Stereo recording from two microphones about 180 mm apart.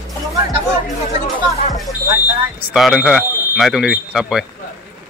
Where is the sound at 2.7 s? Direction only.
Centre (ahead or behind).